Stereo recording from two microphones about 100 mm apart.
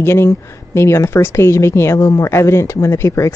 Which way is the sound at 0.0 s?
25° left (ahead or behind).